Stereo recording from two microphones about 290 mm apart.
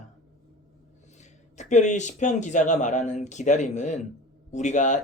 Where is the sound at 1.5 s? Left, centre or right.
Left.